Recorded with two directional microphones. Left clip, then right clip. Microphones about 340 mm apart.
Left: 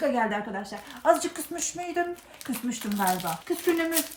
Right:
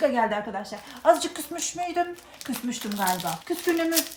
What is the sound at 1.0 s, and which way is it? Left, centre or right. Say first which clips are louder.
Speech: right 2 dB; centre.